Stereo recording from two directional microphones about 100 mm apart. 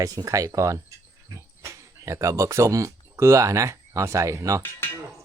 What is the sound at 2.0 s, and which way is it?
Speech, 30° right (ahead or behind).